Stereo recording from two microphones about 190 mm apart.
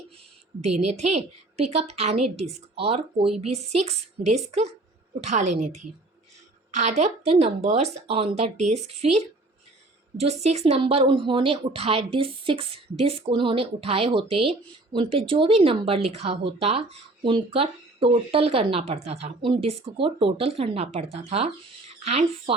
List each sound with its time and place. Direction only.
0.9 s a woman's voice: 35° right (ahead or behind)